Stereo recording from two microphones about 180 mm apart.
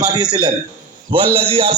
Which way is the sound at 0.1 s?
25° right (ahead or behind).